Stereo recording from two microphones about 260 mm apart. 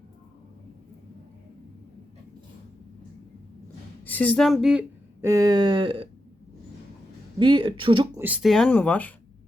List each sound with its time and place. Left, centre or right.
4.0 s speech: centre
7.3 s speech: centre
8.2 s speech: centre